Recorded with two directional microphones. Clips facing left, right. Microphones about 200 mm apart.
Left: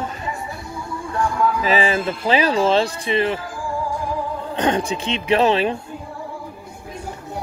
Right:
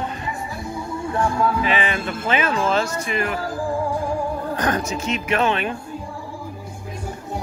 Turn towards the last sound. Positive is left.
turn(degrees=30)  # may be behind; listen again after turning